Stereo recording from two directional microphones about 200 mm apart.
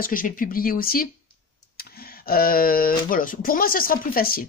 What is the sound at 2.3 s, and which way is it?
Speech, 45° left (ahead or behind).